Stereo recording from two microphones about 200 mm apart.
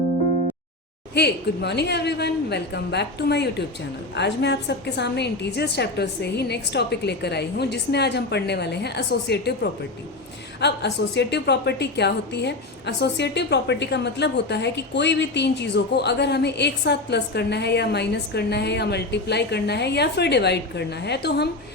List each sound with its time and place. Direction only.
1.1 s a woman's voice: 55° left (ahead or behind)
10.6 s a woman's voice: 60° left (ahead or behind)